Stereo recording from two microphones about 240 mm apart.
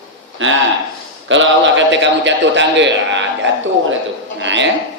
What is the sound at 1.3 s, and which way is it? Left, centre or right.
A man's voice, right.